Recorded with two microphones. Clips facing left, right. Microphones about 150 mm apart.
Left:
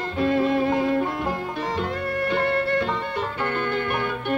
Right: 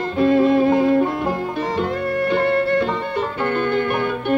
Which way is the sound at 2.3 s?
35° right (ahead or behind).